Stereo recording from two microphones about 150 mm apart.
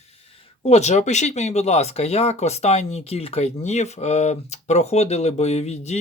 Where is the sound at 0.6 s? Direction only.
50° left (ahead or behind).